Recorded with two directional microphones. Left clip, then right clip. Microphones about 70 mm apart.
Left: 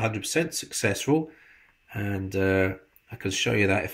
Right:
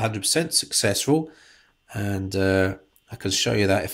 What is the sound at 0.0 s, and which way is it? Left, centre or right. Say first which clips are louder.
Speech: right 3 dB; right.